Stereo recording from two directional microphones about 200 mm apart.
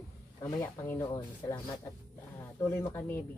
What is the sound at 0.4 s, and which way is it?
Speech, 15° left (ahead or behind).